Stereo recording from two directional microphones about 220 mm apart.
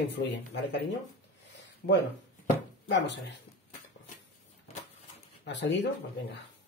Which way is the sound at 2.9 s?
55° left (ahead or behind).